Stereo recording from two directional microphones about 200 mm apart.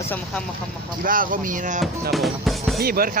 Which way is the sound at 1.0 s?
45° right (ahead or behind).